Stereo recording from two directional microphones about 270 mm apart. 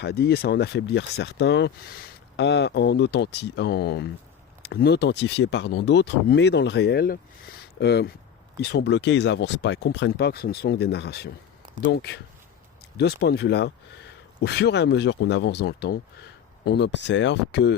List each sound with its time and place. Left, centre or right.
0.0 s speech: left